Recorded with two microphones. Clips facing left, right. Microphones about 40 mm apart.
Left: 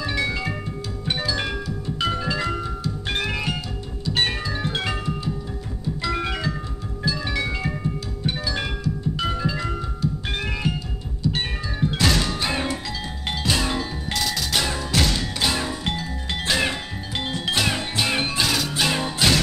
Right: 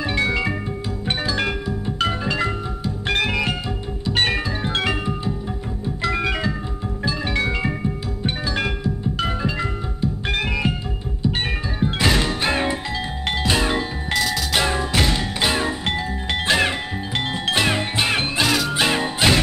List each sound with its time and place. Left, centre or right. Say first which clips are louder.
0.0 s music: right 4 dB; right
3.1 s music: right 6 dB; right
4.0 s music: right 3 dB; right
8.8 s music: right 2 dB; right
10.2 s music: right 4 dB; right
11.2 s music: right 2 dB; right
14.1 s music: right 5 dB; centre
14.5 s music: right 3 dB; right